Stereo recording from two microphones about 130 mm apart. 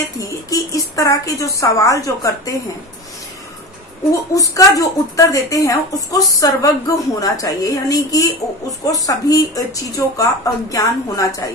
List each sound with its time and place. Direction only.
0.2 s a woman's voice: 25° left (ahead or behind)
4.1 s a woman's voice: 25° left (ahead or behind)